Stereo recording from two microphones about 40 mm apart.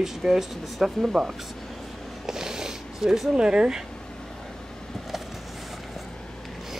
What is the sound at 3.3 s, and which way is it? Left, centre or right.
Speech, right.